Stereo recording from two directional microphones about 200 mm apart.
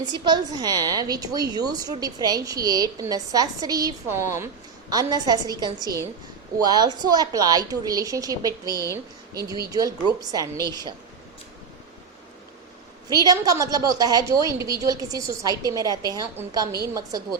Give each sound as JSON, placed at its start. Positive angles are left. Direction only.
{"t": 0.0, "sound": "a woman's voice", "side_deg": -20}
{"t": 13.1, "sound": "a woman's voice", "side_deg": -20}